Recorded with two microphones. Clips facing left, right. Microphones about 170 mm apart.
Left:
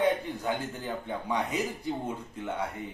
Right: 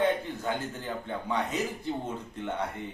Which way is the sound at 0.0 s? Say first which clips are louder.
Even; 10° left (ahead or behind).